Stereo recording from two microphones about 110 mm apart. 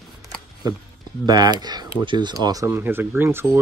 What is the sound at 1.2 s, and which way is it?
Speech, 40° right (ahead or behind).